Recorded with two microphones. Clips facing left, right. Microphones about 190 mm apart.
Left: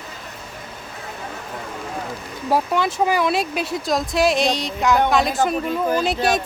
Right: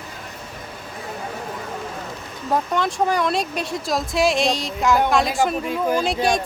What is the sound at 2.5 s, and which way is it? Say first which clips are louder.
Speech: left 2 dB; 5° left (ahead or behind).